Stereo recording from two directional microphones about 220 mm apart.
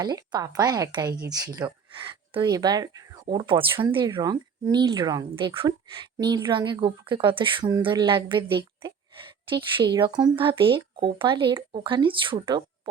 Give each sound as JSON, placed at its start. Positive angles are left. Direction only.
{"t": 0.0, "sound": "a woman's voice", "side_deg": -20}